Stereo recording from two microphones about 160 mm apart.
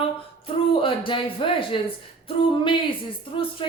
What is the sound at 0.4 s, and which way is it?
A woman's voice, 35° left (ahead or behind).